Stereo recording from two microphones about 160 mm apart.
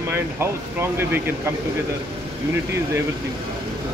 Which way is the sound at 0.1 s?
15° right (ahead or behind).